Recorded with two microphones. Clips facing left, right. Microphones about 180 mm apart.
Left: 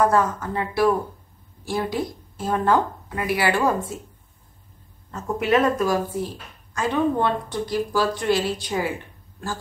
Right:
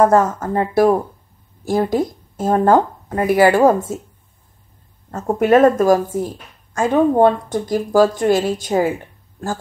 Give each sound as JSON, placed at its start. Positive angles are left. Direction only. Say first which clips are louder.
{"t": 0.0, "sound": "a woman's voice", "louder": "right 6 dB", "side_deg": -45}
{"t": 5.1, "sound": "a woman's voice", "louder": "right 7 dB", "side_deg": -50}